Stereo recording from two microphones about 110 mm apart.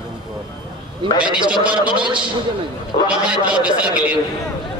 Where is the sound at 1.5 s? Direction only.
10° right (ahead or behind).